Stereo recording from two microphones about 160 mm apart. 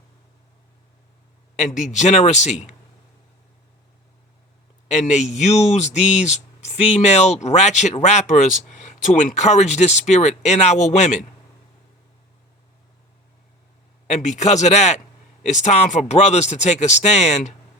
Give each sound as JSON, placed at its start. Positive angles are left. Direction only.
{"t": 1.5, "sound": "speech", "side_deg": 50}
{"t": 4.9, "sound": "speech", "side_deg": 45}
{"t": 14.1, "sound": "speech", "side_deg": 45}